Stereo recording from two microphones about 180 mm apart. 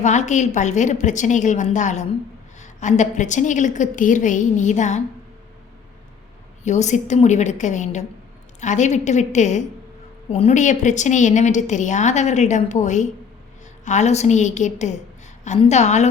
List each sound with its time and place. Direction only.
0.0 s a woman's voice: 40° left (ahead or behind)
6.7 s a woman's voice: 40° left (ahead or behind)